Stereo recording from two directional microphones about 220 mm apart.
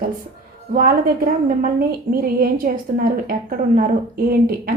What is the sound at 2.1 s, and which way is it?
A woman's voice, 40° right (ahead or behind).